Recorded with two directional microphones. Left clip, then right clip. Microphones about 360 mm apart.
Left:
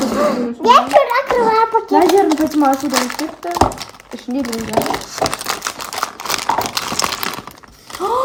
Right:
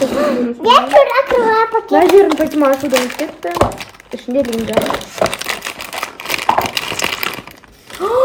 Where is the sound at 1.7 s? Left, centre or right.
Centre.